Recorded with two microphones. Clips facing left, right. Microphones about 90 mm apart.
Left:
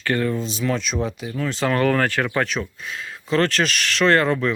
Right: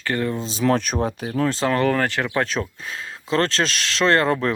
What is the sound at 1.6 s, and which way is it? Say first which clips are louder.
Speech: left 3 dB; 20° right (ahead or behind).